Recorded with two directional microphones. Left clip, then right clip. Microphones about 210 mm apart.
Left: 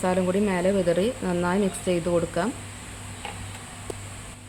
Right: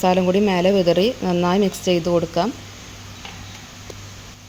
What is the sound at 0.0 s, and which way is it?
Speech, 25° right (ahead or behind).